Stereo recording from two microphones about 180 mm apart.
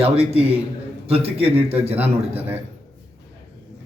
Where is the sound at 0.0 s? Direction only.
35° right (ahead or behind).